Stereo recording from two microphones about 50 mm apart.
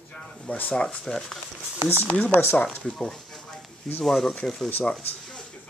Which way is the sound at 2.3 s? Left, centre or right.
Left.